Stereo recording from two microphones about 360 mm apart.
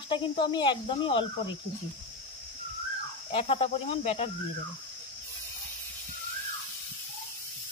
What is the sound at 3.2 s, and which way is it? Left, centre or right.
Speech, centre.